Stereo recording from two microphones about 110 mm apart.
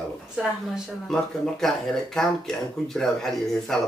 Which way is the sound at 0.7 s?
5° left (ahead or behind).